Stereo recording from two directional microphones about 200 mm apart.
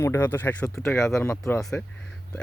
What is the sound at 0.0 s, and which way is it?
Speech, 10° left (ahead or behind).